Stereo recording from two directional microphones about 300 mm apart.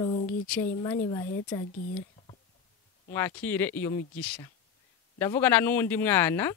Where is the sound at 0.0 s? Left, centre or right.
Centre.